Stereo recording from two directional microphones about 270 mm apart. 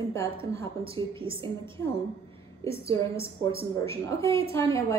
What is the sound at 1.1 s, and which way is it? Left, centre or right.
Speech, centre.